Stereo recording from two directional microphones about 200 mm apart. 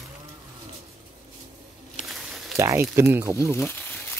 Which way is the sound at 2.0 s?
40° left (ahead or behind).